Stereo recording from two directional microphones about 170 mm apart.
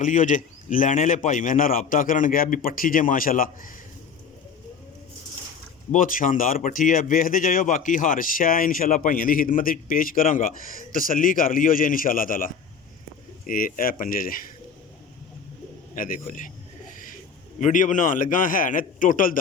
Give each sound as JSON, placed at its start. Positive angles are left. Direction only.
{"t": 0.0, "sound": "speech", "side_deg": 50}
{"t": 5.9, "sound": "speech", "side_deg": 50}
{"t": 13.5, "sound": "speech", "side_deg": 55}
{"t": 16.0, "sound": "speech", "side_deg": 55}
{"t": 17.6, "sound": "speech", "side_deg": 50}